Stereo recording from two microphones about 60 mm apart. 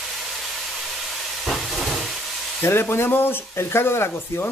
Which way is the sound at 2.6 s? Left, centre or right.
Left.